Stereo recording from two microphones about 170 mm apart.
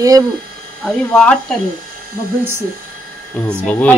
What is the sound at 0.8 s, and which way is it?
Speech, 5° left (ahead or behind).